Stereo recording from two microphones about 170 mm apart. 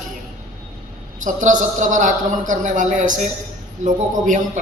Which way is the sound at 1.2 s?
50° right (ahead or behind).